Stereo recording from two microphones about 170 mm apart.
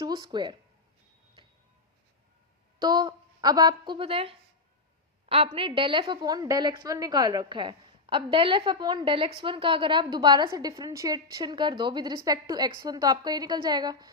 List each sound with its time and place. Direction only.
0.0 s speech: 25° right (ahead or behind)
2.7 s a woman's voice: 20° right (ahead or behind)